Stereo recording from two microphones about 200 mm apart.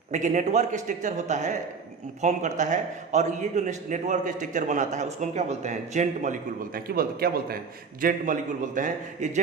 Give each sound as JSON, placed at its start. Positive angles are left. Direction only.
{"t": 0.1, "sound": "a man's voice", "side_deg": -35}
{"t": 6.7, "sound": "a man's voice", "side_deg": -50}
{"t": 8.0, "sound": "a man's voice", "side_deg": -40}